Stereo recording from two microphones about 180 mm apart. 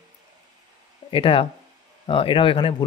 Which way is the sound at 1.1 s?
30° left (ahead or behind).